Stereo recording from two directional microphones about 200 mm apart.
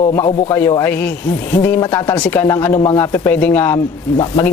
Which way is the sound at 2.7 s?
25° left (ahead or behind).